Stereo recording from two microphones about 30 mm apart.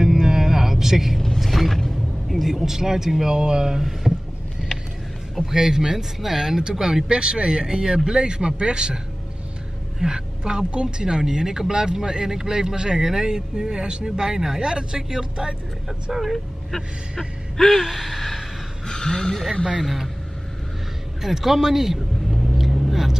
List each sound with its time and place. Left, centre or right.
0.0 s music: centre
1.4 s mechanisms: centre
2.2 s vehicle: centre
2.6 s a man's voice: centre
5.4 s a man's voice: centre
7.2 s speech: right
16.1 s a man's voice: centre
17.7 s gasp: centre
18.9 s speech: left
19.8 s gasp: centre
21.2 s vehicle: centre